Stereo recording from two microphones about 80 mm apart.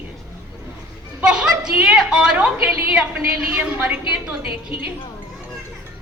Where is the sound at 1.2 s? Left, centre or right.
Centre.